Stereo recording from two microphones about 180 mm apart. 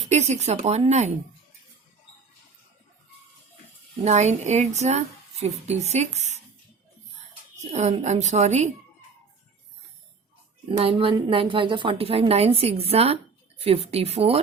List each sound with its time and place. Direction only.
0.1 s a woman's voice: 40° right (ahead or behind)
4.0 s a woman's voice: 40° right (ahead or behind)
7.6 s a woman's voice: 40° right (ahead or behind)
10.7 s a woman's voice: 30° right (ahead or behind)